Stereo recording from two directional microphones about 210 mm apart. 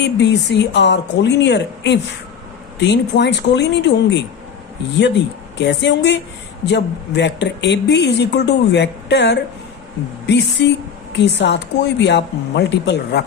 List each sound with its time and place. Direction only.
0.0 s speech: 55° left (ahead or behind)
5.5 s speech: 55° left (ahead or behind)